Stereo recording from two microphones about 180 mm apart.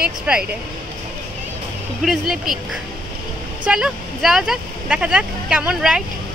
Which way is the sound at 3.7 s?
5° right (ahead or behind).